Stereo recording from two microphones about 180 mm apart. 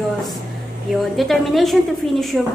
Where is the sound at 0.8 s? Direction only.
Centre (ahead or behind).